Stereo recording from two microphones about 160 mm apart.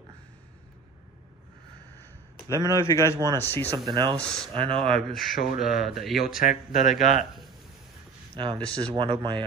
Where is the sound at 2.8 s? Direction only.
20° left (ahead or behind).